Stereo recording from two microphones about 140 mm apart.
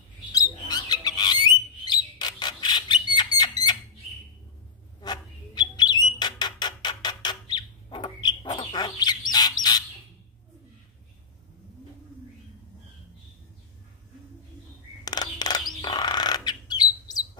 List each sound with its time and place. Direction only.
0.3 s bird: 30° left (ahead or behind)
5.0 s bird: 30° left (ahead or behind)
15.0 s bird: 30° left (ahead or behind)